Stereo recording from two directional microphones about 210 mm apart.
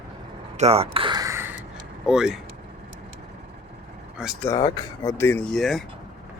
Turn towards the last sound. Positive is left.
turn(degrees=0)  # may be behind; listen again after turning